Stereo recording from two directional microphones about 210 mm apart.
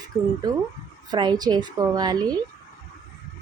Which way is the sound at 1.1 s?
20° right (ahead or behind).